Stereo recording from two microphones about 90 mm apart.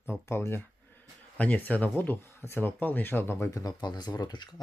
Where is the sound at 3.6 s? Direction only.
50° left (ahead or behind).